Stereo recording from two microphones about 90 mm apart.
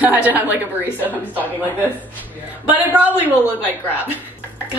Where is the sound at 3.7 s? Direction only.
20° right (ahead or behind).